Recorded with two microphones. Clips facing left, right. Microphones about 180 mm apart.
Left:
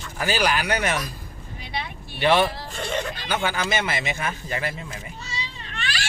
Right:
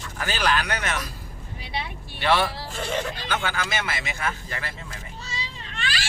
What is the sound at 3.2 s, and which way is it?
Speech, 15° left (ahead or behind).